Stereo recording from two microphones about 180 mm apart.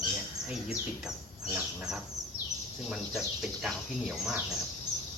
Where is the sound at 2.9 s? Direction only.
5° right (ahead or behind).